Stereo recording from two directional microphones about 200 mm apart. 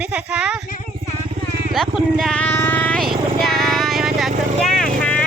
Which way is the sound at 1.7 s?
Centre (ahead or behind).